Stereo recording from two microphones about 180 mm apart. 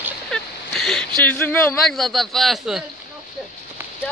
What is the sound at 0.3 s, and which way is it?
Speech, 5° left (ahead or behind).